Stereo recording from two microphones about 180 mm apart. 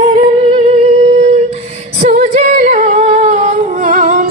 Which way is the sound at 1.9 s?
40° right (ahead or behind).